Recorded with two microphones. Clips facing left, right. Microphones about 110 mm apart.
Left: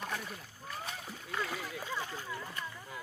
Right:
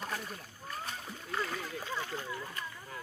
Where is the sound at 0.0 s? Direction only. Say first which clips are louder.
Even; centre (ahead or behind).